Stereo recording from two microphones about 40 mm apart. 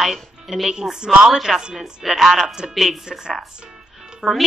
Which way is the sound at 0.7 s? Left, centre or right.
Centre.